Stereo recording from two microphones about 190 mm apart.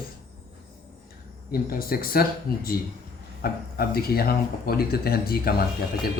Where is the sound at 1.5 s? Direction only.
50° left (ahead or behind).